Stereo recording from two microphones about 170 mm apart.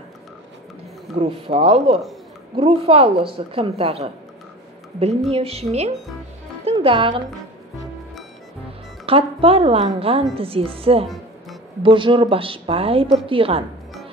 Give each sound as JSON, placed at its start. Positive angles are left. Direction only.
{"t": 1.1, "sound": "a woman's voice", "side_deg": -35}
{"t": 5.3, "sound": "a woman's voice", "side_deg": -35}
{"t": 9.0, "sound": "a woman's voice", "side_deg": -35}